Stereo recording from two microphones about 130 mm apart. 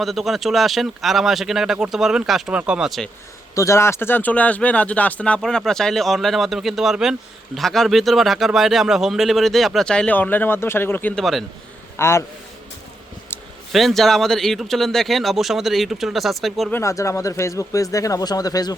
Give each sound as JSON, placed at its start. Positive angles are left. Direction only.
{"t": 0.0, "sound": "speech", "side_deg": 0}
{"t": 3.5, "sound": "speech", "side_deg": 25}
{"t": 11.2, "sound": "speech", "side_deg": 0}
{"t": 11.9, "sound": "speech", "side_deg": 20}
{"t": 13.7, "sound": "speech", "side_deg": 0}
{"t": 16.7, "sound": "speech", "side_deg": 25}